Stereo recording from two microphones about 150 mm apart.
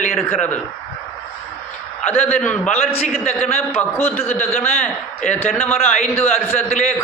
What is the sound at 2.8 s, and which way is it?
Speech, 40° left (ahead or behind).